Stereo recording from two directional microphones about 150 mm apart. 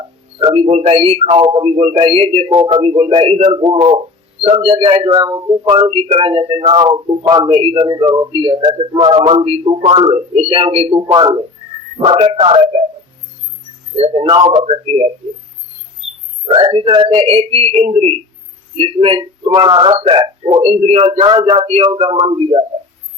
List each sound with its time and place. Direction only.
0.3 s speech: 40° right (ahead or behind)
2.5 s a man's voice: 30° right (ahead or behind)
2.8 s speech: 40° right (ahead or behind)
3.6 s speech: 30° right (ahead or behind)
11.1 s speech: 30° right (ahead or behind)
14.0 s speech: 40° right (ahead or behind)
16.6 s speech: 35° right (ahead or behind)
20.6 s a man's voice: 45° right (ahead or behind)
21.2 s speech: 35° right (ahead or behind)